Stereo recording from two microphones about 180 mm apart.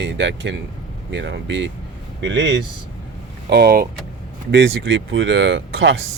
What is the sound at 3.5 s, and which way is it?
Speech, 60° right (ahead or behind).